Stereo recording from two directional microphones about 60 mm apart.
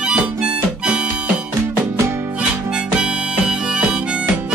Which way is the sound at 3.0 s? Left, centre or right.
Centre.